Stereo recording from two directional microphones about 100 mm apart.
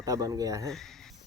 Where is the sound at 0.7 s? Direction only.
5° left (ahead or behind).